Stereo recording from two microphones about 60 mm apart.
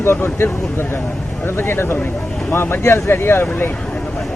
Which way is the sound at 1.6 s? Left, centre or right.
Left.